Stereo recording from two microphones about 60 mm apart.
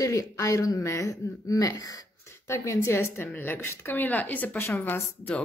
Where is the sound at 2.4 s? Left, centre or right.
Left.